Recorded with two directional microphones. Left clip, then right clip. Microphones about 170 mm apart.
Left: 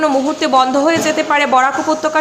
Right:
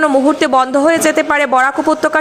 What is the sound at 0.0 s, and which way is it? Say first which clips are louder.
A man's voice: right 3 dB; 35° right (ahead or behind).